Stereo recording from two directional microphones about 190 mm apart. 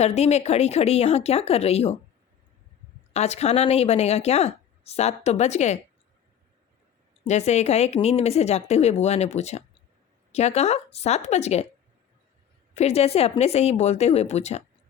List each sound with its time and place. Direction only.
0.0 s speech: 35° left (ahead or behind)
3.1 s speech: 35° left (ahead or behind)
7.3 s speech: 35° left (ahead or behind)
12.7 s speech: 35° left (ahead or behind)